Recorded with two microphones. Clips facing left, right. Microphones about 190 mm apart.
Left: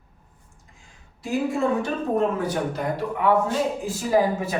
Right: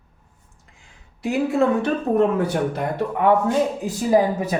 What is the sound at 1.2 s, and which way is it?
Speech, 65° right (ahead or behind).